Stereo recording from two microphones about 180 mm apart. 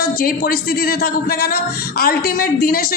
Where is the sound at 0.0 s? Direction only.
55° left (ahead or behind).